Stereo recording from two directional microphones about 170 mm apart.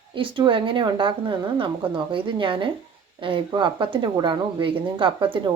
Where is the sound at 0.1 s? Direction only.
30° right (ahead or behind).